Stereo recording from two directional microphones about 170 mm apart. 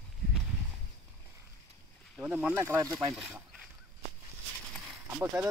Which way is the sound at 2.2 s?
5° right (ahead or behind).